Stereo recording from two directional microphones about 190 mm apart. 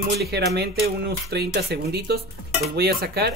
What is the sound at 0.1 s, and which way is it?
Speech, 60° right (ahead or behind).